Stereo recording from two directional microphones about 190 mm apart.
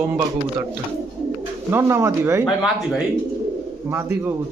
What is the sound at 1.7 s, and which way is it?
Speech, 10° right (ahead or behind).